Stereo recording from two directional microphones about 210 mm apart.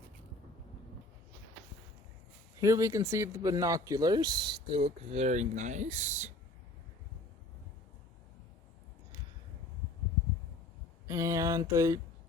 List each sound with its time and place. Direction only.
2.6 s speech: 15° right (ahead or behind); by 6.3 s 35° right (ahead or behind)
11.0 s speech: 15° right (ahead or behind)